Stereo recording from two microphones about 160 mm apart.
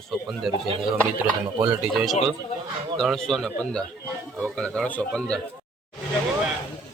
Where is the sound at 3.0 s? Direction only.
5° left (ahead or behind).